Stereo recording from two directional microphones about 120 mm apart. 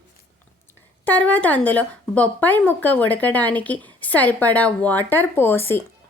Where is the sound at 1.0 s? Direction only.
15° left (ahead or behind).